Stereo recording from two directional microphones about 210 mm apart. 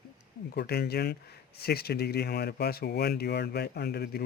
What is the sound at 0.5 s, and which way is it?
Speech, 50° left (ahead or behind).